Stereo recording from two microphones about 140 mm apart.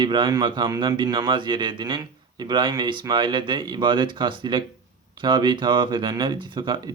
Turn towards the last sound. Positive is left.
turn(degrees=-35)  # may be behind; listen again after turning